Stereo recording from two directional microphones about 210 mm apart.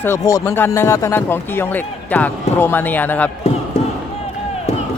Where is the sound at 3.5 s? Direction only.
30° left (ahead or behind).